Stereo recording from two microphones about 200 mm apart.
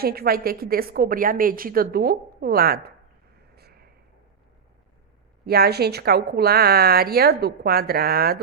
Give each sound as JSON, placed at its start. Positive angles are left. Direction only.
{"t": 0.0, "sound": "a woman's voice", "side_deg": -50}
{"t": 3.5, "sound": "a sound", "side_deg": -50}
{"t": 5.5, "sound": "a woman's voice", "side_deg": -50}